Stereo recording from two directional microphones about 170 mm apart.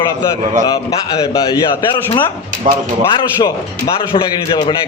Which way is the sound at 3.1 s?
30° left (ahead or behind).